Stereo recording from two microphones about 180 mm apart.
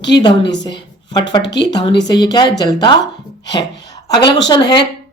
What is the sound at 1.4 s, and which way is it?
Speech, 75° left (ahead or behind).